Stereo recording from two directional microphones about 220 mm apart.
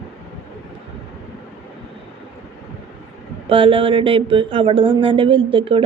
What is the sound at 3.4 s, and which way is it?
Speech, 25° right (ahead or behind).